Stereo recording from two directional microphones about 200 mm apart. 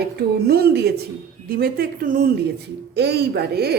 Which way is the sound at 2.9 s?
55° right (ahead or behind).